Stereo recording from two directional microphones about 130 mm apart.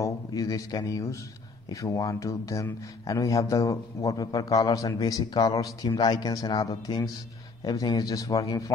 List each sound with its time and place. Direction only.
0.0 s speech: 25° left (ahead or behind)